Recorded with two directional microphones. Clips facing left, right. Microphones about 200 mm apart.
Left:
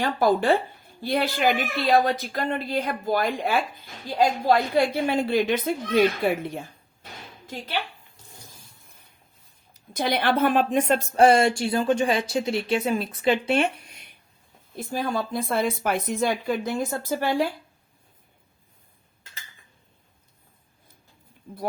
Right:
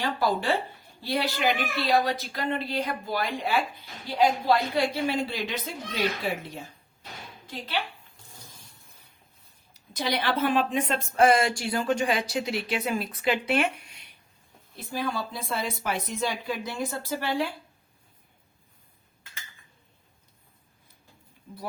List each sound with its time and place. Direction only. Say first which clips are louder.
0.0 s speech: left 5 dB; 50° left (ahead or behind)
7.4 s speech: left 3 dB; 45° left (ahead or behind)
9.7 s speech: left 4 dB; 50° left (ahead or behind)
11.1 s speech: left 3 dB; 30° left (ahead or behind)
14.8 s speech: left 4 dB; 45° left (ahead or behind)